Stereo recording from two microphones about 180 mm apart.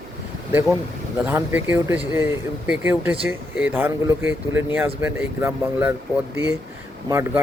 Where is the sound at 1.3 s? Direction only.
10° right (ahead or behind).